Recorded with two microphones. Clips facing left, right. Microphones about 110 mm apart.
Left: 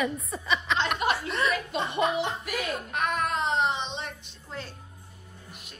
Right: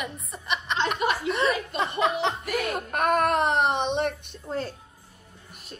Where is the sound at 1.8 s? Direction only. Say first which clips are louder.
Even; 85° right.